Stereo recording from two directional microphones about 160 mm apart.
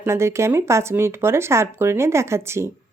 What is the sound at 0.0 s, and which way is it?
Speech, 15° right (ahead or behind).